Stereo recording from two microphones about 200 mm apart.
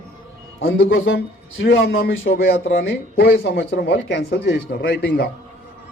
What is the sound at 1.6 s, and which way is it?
Speech, 65° left (ahead or behind).